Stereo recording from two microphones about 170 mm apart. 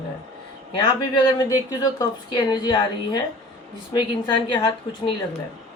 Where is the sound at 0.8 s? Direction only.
25° left (ahead or behind).